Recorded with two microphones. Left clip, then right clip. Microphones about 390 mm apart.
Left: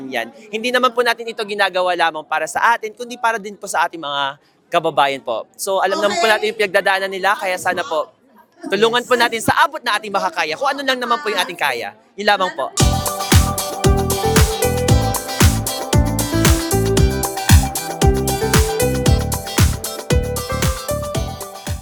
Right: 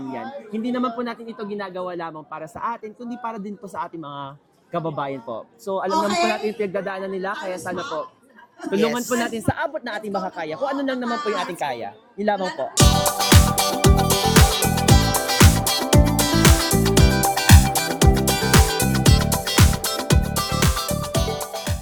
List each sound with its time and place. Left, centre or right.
0.8 s speech: left
1.7 s speech: centre
3.2 s speech: left
6.3 s music: left
8.7 s speech: left
12.7 s music: centre